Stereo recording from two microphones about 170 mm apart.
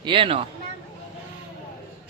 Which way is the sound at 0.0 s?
30° right (ahead or behind).